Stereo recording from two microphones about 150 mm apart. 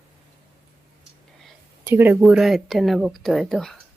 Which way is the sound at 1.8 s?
15° right (ahead or behind).